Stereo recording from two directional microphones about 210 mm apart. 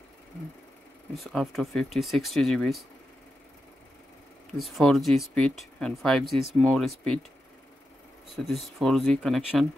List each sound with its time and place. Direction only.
1.1 s speech: centre (ahead or behind)
4.6 s speech: centre (ahead or behind)
8.4 s speech: 5° left (ahead or behind)